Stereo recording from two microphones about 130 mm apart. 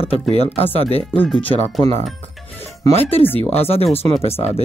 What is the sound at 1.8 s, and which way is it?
Speech, 50° right (ahead or behind).